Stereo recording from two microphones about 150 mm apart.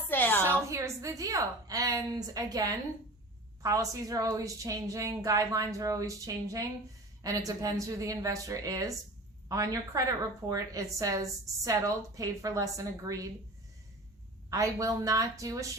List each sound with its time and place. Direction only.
0.1 s a sound: 15° left (ahead or behind)
0.7 s a woman's voice: 20° right (ahead or behind)
14.5 s a woman's voice: 20° right (ahead or behind)